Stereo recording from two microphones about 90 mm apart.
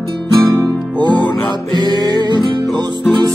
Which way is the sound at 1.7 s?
55° right (ahead or behind).